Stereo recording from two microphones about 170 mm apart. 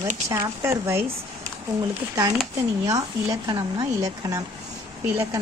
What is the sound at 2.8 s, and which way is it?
Speech, 20° right (ahead or behind).